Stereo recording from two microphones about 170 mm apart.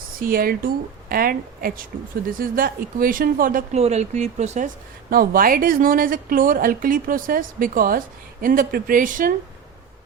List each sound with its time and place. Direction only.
0.2 s a woman's voice: 55° right (ahead or behind)
3.8 s speech: 40° right (ahead or behind)
5.1 s a woman's voice: 60° right (ahead or behind)